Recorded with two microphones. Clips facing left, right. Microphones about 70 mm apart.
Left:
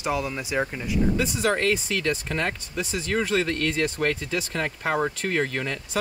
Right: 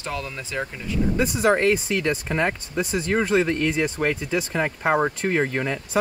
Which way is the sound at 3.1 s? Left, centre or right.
Centre.